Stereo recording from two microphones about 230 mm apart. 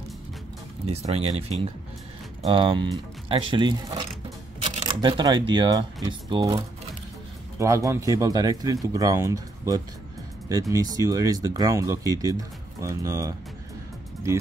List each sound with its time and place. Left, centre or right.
0.8 s speech: right